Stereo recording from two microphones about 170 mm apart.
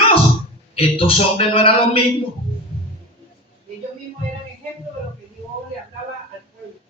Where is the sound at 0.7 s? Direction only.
35° left (ahead or behind).